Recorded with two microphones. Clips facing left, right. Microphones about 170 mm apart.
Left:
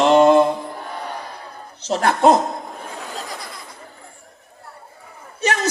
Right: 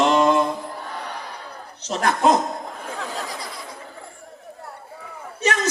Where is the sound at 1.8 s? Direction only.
35° left (ahead or behind).